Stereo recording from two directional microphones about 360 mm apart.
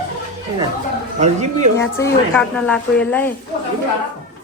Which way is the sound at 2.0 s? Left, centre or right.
Centre.